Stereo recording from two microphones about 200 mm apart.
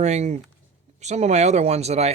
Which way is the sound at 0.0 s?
35° right (ahead or behind).